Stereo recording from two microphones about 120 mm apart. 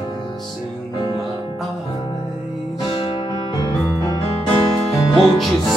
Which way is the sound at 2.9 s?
45° left (ahead or behind).